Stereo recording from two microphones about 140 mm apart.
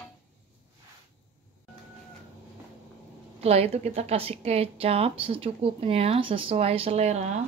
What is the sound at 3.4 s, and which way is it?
A woman's voice, 45° right (ahead or behind).